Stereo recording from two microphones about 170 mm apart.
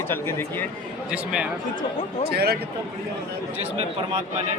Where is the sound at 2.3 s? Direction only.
65° right (ahead or behind).